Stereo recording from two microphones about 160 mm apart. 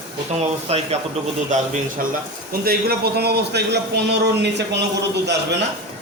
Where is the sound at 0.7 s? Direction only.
40° right (ahead or behind).